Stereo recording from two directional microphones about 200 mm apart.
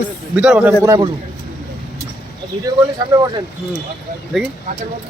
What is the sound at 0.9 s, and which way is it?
Speech, 25° right (ahead or behind).